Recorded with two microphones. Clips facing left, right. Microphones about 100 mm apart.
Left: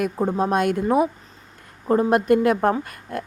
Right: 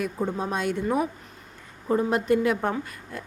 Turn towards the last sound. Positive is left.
turn(degrees=60)  # may be behind; listen again after turning